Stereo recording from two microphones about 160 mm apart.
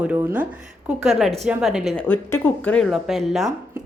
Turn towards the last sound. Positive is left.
turn(degrees=0)  # may be behind; listen again after turning